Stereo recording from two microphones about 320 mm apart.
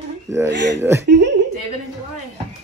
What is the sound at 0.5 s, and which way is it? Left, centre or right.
Female singing, right.